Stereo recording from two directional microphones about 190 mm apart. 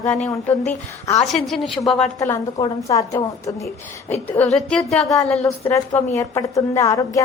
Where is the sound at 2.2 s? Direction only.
15° left (ahead or behind).